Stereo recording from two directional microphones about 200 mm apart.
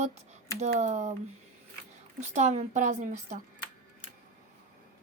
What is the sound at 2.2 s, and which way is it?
A woman's voice, 35° right (ahead or behind).